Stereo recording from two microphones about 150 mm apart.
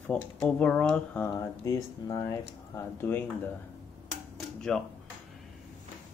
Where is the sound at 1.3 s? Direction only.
20° left (ahead or behind).